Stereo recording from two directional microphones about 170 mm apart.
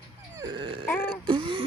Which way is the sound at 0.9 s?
10° left (ahead or behind).